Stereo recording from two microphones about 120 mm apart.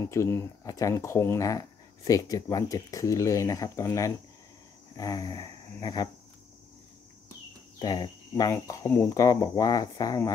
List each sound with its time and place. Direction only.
0.0 s speech: 25° left (ahead or behind)
7.8 s speech: 35° left (ahead or behind)